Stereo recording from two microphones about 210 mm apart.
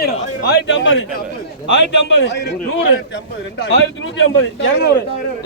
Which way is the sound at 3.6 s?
60° left (ahead or behind).